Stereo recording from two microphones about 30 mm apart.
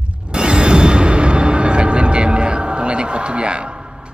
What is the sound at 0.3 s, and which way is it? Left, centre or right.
Music, right.